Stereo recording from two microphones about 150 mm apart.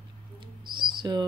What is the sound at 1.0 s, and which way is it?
Speech, 30° right (ahead or behind).